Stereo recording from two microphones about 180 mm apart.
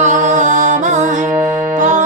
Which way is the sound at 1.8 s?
40° right (ahead or behind).